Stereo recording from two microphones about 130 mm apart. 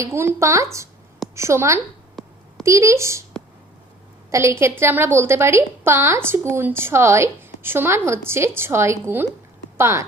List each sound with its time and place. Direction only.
0.0 s a woman's voice: 20° right (ahead or behind)
4.3 s a woman's voice: 20° right (ahead or behind)